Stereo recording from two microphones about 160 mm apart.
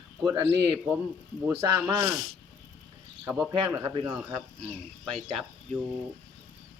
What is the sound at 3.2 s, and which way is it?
Speech, 5° right (ahead or behind).